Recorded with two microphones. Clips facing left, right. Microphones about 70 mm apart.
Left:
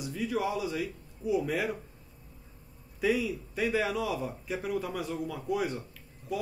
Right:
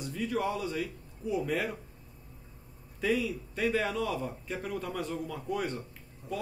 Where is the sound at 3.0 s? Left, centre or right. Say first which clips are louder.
Left 1 dB; centre.